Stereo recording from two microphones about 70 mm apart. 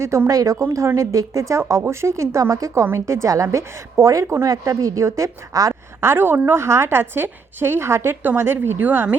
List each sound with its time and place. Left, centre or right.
0.0 s a woman's voice: right
2.8 s a woman's voice: right
6.0 s a woman's voice: right